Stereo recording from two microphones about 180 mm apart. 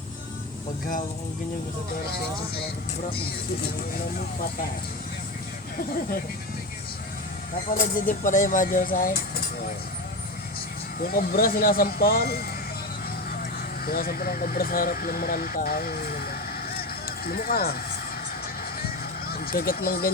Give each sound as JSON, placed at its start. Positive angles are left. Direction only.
{"t": 7.9, "sound": "speech", "side_deg": 50}
{"t": 11.0, "sound": "speech", "side_deg": 55}
{"t": 13.8, "sound": "speech", "side_deg": 55}
{"t": 16.7, "sound": "a sound", "side_deg": 55}
{"t": 19.3, "sound": "speech", "side_deg": 55}